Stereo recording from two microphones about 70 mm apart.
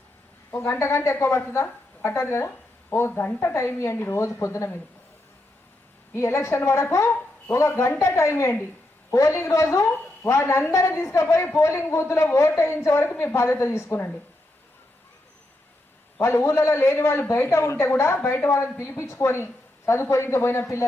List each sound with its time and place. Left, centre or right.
0.5 s a man's voice: left
6.1 s a man's voice: left
16.2 s a man's voice: left